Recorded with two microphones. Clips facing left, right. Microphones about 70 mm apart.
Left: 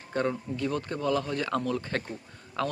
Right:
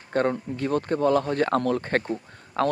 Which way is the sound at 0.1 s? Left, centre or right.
Right.